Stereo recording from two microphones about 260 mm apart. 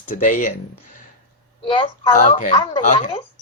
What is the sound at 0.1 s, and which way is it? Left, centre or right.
Speech, left.